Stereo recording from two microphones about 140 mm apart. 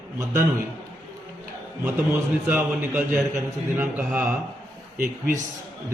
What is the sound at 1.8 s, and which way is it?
A man's voice, 15° right (ahead or behind).